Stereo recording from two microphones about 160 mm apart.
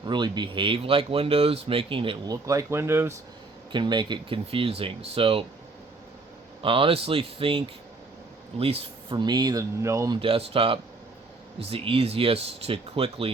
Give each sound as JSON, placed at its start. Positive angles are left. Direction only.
{"t": 0.0, "sound": "speech", "side_deg": -30}
{"t": 2.3, "sound": "speech", "side_deg": -20}
{"t": 3.7, "sound": "speech", "side_deg": -30}
{"t": 6.6, "sound": "speech", "side_deg": -35}
{"t": 10.2, "sound": "speech", "side_deg": -35}